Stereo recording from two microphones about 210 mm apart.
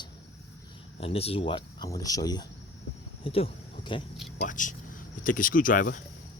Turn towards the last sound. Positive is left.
turn(degrees=40)  # may be behind; listen again after turning